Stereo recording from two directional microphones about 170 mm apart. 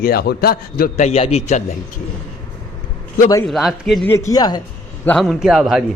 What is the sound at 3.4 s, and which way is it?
Speech, centre (ahead or behind).